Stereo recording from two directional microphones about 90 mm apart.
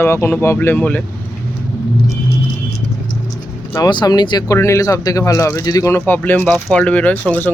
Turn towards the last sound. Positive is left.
turn(degrees=20)  # may be behind; listen again after turning